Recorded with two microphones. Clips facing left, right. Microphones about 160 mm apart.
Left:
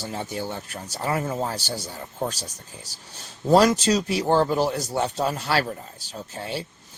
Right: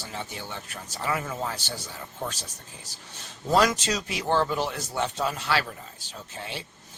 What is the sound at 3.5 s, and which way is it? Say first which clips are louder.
Speech: left 6 dB; 35° left (ahead or behind).